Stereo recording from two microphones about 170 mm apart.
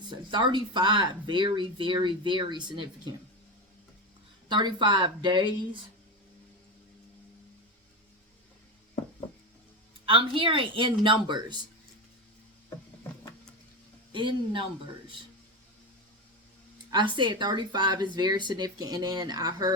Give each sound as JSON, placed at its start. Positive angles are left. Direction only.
{"t": 0.0, "sound": "speech", "side_deg": -25}
{"t": 4.4, "sound": "speech", "side_deg": -25}
{"t": 10.1, "sound": "speech", "side_deg": -30}
{"t": 14.1, "sound": "speech", "side_deg": -30}
{"t": 16.7, "sound": "speech", "side_deg": -25}